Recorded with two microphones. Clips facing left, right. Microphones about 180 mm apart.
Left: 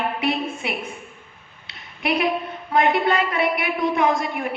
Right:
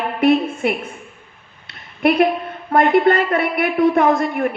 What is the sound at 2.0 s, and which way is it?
A woman's voice, 55° right (ahead or behind).